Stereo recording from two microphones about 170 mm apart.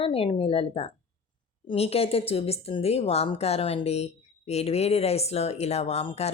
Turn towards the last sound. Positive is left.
turn(degrees=35)  # may be behind; listen again after turning